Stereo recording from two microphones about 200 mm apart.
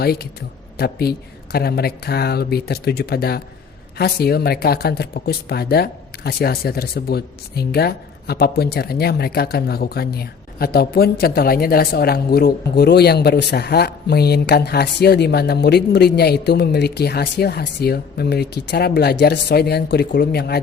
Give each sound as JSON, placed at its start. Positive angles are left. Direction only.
{"t": 0.0, "sound": "speech", "side_deg": 50}